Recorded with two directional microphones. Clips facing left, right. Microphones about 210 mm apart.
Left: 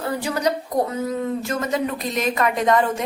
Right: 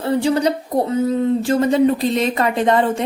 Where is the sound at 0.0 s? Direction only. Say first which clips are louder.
Right 6 dB; 30° right (ahead or behind).